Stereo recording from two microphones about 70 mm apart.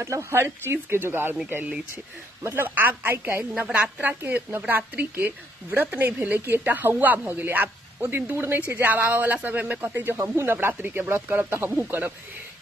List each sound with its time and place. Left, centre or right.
0.0 s speech: right
2.4 s a woman's voice: right
3.7 s a woman's voice: centre